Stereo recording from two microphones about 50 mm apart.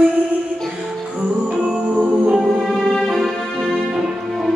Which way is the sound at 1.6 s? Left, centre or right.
Right.